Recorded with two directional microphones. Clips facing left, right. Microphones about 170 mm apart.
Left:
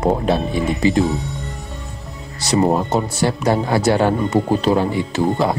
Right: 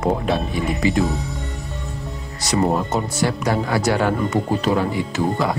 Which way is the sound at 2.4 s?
30° left (ahead or behind).